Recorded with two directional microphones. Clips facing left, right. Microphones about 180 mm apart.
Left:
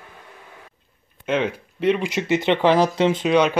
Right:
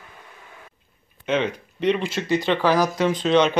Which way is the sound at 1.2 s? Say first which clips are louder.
Left 1 dB; 5° left (ahead or behind).